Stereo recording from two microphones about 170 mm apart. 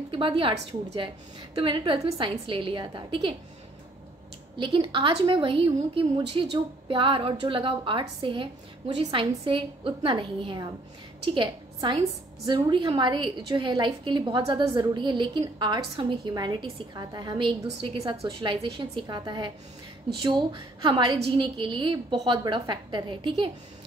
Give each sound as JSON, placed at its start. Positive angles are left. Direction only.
{"t": 0.1, "sound": "a woman's voice", "side_deg": -30}
{"t": 4.6, "sound": "a woman's voice", "side_deg": -30}